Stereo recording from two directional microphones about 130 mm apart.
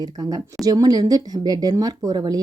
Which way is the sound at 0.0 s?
30° right (ahead or behind).